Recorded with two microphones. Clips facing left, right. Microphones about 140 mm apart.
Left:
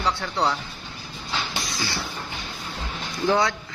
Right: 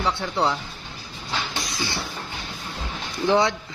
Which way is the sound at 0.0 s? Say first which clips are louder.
Right 1 dB; 25° right (ahead or behind).